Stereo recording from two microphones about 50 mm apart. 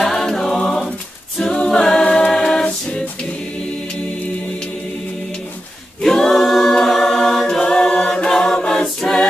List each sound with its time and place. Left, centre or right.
0.0 s music: centre
1.4 s a capella: centre
2.3 s choir: centre
6.0 s a capella: centre